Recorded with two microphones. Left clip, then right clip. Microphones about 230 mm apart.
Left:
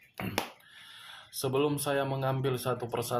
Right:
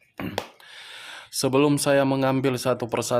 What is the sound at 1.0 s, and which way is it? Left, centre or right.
Speech, right.